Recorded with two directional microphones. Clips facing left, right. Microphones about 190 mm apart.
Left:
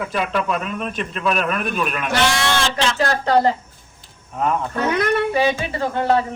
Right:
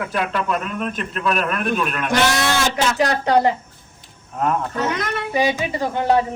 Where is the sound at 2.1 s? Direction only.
10° right (ahead or behind).